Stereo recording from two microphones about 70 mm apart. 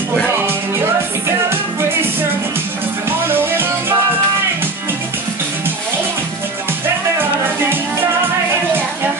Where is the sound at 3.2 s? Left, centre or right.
Right.